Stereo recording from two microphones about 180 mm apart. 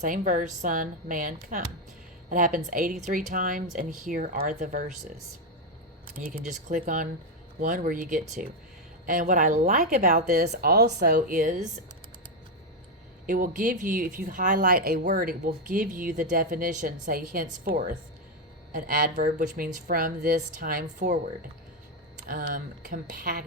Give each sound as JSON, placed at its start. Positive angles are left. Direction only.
{"t": 0.0, "sound": "speech", "side_deg": -45}
{"t": 6.1, "sound": "speech", "side_deg": -50}
{"t": 10.3, "sound": "speech", "side_deg": -65}
{"t": 13.2, "sound": "speech", "side_deg": -50}
{"t": 22.3, "sound": "speech", "side_deg": -50}